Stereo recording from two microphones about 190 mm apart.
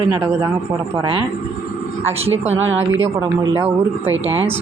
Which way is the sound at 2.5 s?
90° right.